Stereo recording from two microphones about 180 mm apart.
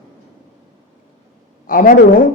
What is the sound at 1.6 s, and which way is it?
Speech, 50° left (ahead or behind).